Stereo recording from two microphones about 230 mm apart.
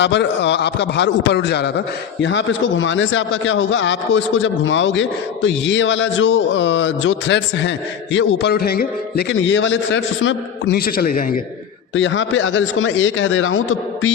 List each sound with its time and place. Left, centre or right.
0.0 s a man's voice: left
11.9 s speech: left